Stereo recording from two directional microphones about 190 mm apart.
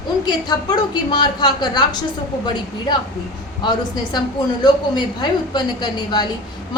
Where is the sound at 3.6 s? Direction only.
20° left (ahead or behind).